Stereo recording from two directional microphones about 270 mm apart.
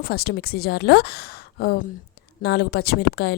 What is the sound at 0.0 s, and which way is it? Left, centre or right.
Speech, left.